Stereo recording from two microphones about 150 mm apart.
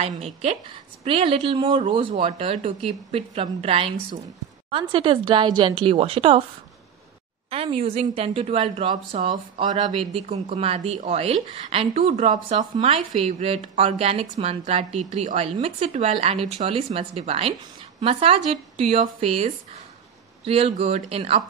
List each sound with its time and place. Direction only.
0.0 s a woman's voice: 45° right (ahead or behind)
7.4 s a woman's voice: 40° right (ahead or behind)
12.1 s speech: 55° right (ahead or behind)
12.8 s a woman's voice: 45° right (ahead or behind)